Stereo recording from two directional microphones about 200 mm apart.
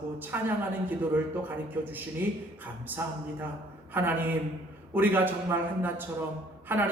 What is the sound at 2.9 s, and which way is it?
Speech, 10° right (ahead or behind).